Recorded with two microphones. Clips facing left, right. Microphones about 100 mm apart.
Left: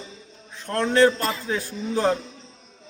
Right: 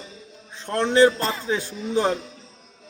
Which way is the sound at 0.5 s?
25° right (ahead or behind).